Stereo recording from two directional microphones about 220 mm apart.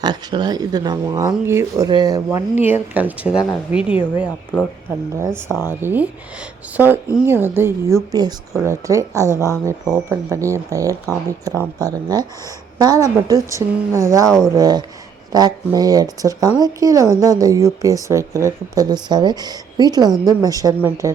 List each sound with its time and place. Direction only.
0.0 s speech: 20° right (ahead or behind)
9.3 s speech: 15° left (ahead or behind)
9.6 s speech: 10° right (ahead or behind)
14.3 s speech: centre (ahead or behind)
14.5 s speech: 15° right (ahead or behind)